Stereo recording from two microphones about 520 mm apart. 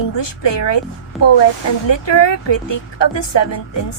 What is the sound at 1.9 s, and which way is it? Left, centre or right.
A woman's voice, left.